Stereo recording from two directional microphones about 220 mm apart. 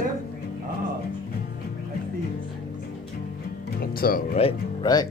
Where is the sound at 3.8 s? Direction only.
45° left (ahead or behind).